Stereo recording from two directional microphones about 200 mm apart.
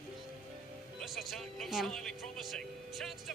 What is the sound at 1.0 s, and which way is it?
Speech, centre (ahead or behind).